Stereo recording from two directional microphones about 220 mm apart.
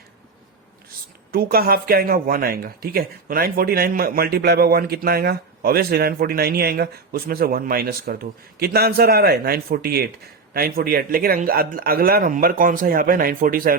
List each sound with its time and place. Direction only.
1.3 s speech: 40° right (ahead or behind)